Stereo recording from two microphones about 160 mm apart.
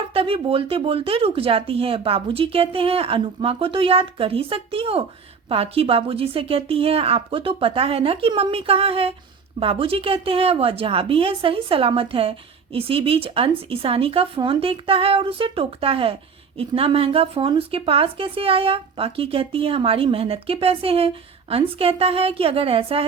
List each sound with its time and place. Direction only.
0.1 s a woman's voice: 35° right (ahead or behind)